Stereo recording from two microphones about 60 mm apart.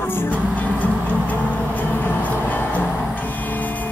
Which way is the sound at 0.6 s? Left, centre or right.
Left.